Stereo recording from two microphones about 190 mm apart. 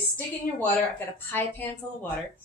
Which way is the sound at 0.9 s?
10° left (ahead or behind).